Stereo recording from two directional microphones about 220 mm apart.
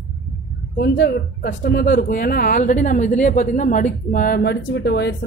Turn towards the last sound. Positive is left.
turn(degrees=50)  # may be behind; listen again after turning